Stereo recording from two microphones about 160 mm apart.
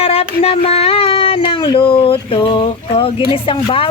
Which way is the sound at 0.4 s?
35° left (ahead or behind).